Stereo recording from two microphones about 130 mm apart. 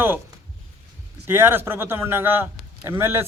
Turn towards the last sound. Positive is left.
turn(degrees=-20)  # may be behind; listen again after turning